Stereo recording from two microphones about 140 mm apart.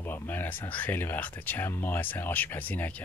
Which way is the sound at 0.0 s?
15° left (ahead or behind).